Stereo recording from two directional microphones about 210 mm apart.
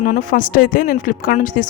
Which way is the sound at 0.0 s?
40° left (ahead or behind).